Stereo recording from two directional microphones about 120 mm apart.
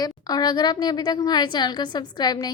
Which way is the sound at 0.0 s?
35° left (ahead or behind).